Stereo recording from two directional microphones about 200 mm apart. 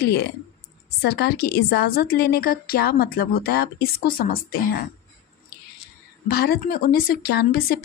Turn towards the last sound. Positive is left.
turn(degrees=50)  # may be behind; listen again after turning